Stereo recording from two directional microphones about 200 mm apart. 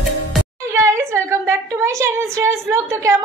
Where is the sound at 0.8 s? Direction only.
15° right (ahead or behind).